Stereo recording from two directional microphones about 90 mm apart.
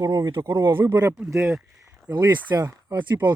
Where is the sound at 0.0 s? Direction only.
45° right (ahead or behind).